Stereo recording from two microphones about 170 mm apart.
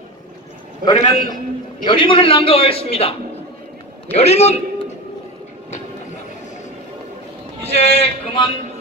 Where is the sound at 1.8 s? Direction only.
30° left (ahead or behind).